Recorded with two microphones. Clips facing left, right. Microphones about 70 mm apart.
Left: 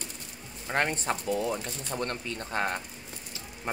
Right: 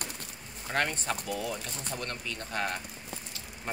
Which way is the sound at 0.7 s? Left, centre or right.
Left.